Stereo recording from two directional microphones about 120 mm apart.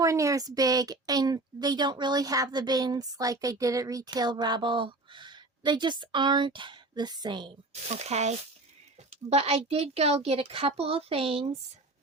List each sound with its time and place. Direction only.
0.0 s a woman's voice: 25° right (ahead or behind)
7.7 s speech: 65° right (ahead or behind)
9.3 s a woman's voice: 55° right (ahead or behind)